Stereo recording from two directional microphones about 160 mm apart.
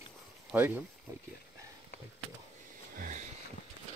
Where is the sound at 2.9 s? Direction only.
60° right (ahead or behind).